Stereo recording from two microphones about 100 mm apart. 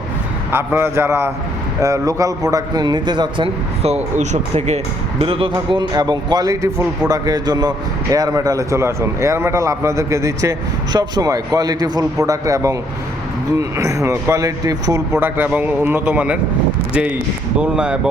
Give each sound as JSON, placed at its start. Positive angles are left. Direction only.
{"t": 0.5, "sound": "a man's voice", "side_deg": -20}
{"t": 5.2, "sound": "a man's voice", "side_deg": -65}
{"t": 10.9, "sound": "a man's voice", "side_deg": -40}
{"t": 15.1, "sound": "a man's voice", "side_deg": -20}